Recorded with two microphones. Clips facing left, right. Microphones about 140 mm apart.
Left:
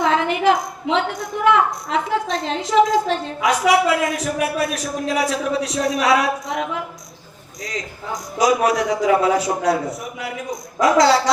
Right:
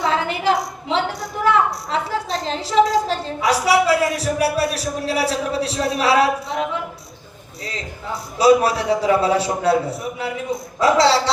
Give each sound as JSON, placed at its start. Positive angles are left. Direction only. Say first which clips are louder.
{"t": 0.0, "sound": "a woman's voice", "louder": "left 3 dB", "side_deg": -35}
{"t": 7.6, "sound": "a woman's voice", "louder": "left 1 dB", "side_deg": -30}